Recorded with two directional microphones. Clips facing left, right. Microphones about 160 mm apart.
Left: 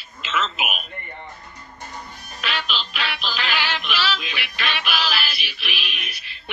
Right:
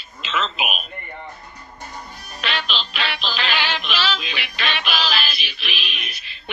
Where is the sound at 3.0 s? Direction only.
10° left (ahead or behind).